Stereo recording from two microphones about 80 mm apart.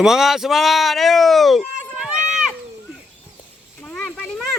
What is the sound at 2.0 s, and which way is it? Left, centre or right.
Run, centre.